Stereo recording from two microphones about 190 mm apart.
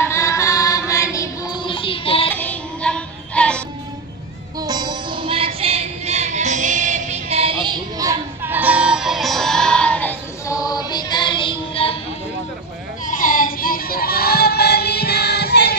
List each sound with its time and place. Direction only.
0.0 s music: 15° left (ahead or behind)
2.3 s music: 10° left (ahead or behind)
4.6 s music: 20° right (ahead or behind); by 12.0 s 30° left (ahead or behind)
13.0 s child singing: 45° left (ahead or behind); by 15.7 s 60° left (ahead or behind)